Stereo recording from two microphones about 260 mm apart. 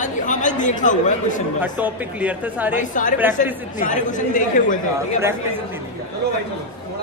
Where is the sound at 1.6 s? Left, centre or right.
Centre.